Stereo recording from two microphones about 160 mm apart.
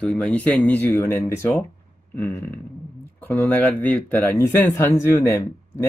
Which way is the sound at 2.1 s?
15° left (ahead or behind).